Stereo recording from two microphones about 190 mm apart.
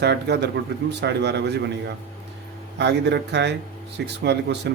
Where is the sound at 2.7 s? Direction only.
65° right (ahead or behind).